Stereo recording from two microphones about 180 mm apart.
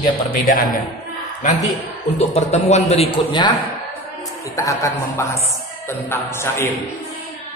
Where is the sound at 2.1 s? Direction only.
35° left (ahead or behind).